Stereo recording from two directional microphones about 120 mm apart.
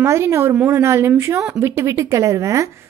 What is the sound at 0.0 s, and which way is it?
A woman's voice, 20° right (ahead or behind).